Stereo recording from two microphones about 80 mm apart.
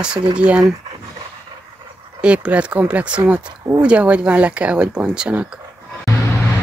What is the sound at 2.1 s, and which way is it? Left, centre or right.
Speech, centre.